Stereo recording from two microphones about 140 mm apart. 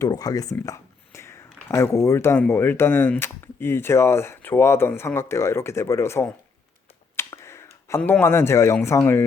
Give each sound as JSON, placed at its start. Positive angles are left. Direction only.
{"t": 0.0, "sound": "speech", "side_deg": 25}
{"t": 7.2, "sound": "finger snapping", "side_deg": 20}
{"t": 8.2, "sound": "speech", "side_deg": 15}